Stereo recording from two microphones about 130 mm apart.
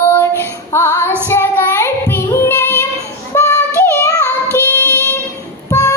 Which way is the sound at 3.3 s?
20° left (ahead or behind).